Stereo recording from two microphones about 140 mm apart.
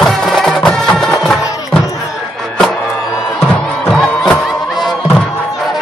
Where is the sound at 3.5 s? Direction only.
5° left (ahead or behind).